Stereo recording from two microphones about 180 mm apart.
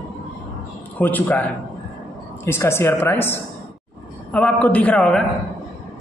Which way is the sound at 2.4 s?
15° left (ahead or behind).